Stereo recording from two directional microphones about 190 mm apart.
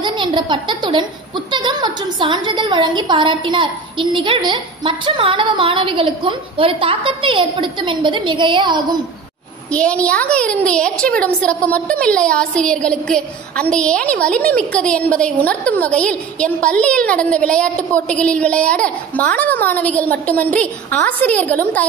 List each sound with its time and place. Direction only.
0.0 s a woman's voice: 25° right (ahead or behind)
9.7 s a woman's voice: 5° left (ahead or behind)